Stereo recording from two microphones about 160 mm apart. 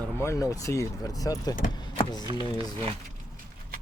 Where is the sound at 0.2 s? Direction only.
20° left (ahead or behind).